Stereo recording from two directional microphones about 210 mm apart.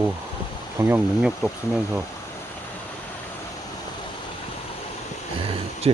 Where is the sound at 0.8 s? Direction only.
10° right (ahead or behind).